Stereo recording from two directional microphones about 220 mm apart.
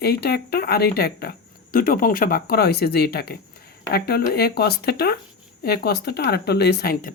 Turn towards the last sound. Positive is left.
turn(degrees=40)  # may be behind; listen again after turning